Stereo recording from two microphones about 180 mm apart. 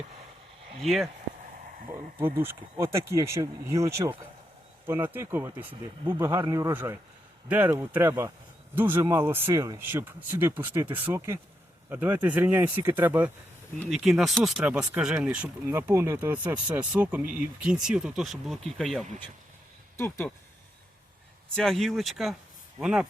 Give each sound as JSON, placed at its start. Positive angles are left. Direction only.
{"t": 0.8, "sound": "speech", "side_deg": 0}
{"t": 1.9, "sound": "speech", "side_deg": -15}
{"t": 20.0, "sound": "speech", "side_deg": 15}
{"t": 21.5, "sound": "speech", "side_deg": 0}